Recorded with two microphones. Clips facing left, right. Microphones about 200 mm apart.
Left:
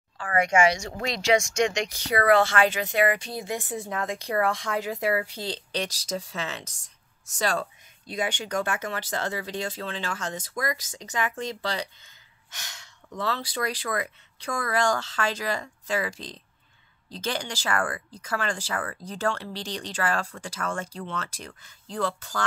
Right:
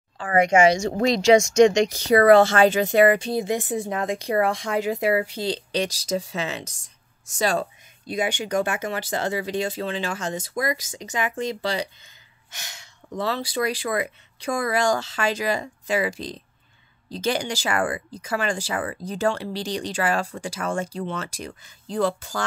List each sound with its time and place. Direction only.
0.2 s speech: 20° right (ahead or behind)
0.8 s speech: 35° right (ahead or behind)
2.8 s speech: 30° right (ahead or behind); by 11.9 s 10° right (ahead or behind)
12.4 s gasp: 10° right (ahead or behind)
13.2 s speech: 10° right (ahead or behind)